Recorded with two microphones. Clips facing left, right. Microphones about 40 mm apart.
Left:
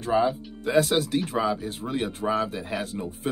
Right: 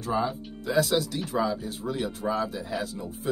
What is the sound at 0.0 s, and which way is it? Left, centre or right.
Speech, left.